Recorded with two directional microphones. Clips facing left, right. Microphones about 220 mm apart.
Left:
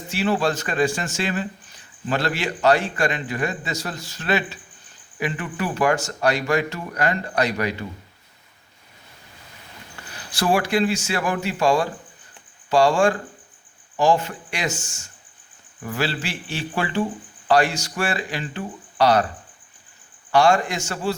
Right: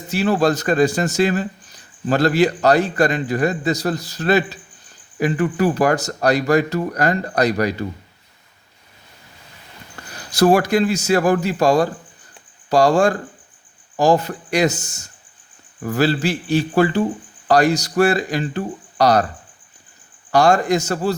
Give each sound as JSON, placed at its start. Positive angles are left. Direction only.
{"t": 0.1, "sound": "a man's voice", "side_deg": -40}
{"t": 10.1, "sound": "a man's voice", "side_deg": -40}
{"t": 20.3, "sound": "a man's voice", "side_deg": -40}